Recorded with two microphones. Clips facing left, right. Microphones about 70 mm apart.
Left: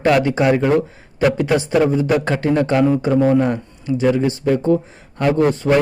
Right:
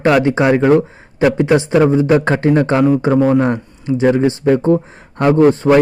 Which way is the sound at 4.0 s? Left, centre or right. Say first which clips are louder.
Right 4 dB; right.